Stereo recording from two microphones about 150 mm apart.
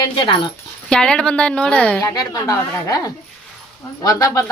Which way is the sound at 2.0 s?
25° left (ahead or behind).